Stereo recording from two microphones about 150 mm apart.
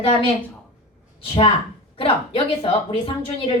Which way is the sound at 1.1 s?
40° left (ahead or behind).